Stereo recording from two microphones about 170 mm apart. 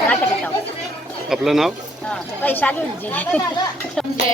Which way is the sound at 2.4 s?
10° left (ahead or behind).